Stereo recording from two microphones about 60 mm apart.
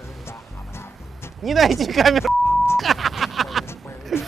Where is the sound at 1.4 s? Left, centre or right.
Centre.